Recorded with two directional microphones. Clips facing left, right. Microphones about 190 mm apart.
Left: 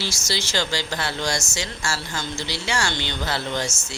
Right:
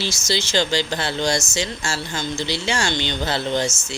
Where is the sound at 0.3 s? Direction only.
20° right (ahead or behind).